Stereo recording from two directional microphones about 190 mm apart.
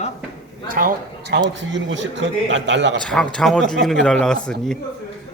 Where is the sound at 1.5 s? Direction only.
75° right (ahead or behind).